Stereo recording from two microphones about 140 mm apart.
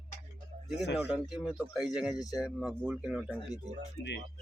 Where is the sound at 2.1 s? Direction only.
25° left (ahead or behind).